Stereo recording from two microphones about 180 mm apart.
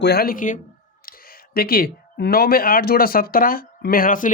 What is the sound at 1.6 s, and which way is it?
Speech, 55° left (ahead or behind).